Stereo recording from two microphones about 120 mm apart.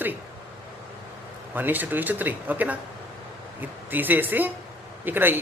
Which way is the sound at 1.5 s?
15° right (ahead or behind).